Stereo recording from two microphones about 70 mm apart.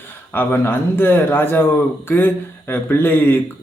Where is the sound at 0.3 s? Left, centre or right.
Left.